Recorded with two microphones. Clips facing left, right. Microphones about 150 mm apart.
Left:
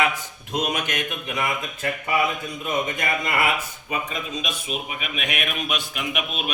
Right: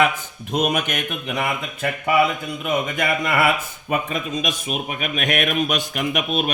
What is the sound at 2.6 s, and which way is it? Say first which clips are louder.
Speech: right 3 dB; 65° right (ahead or behind).